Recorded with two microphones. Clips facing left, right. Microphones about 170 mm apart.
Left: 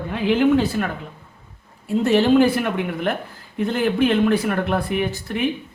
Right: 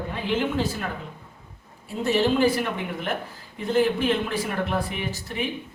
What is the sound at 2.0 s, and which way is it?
Speech, 60° left (ahead or behind).